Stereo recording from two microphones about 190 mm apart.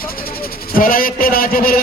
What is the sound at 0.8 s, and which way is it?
A man's voice, 50° left (ahead or behind).